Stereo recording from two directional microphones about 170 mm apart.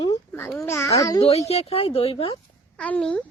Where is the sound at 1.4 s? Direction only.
35° left (ahead or behind).